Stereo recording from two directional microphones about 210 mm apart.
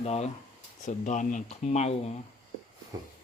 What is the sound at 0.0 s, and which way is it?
Speech, 30° left (ahead or behind).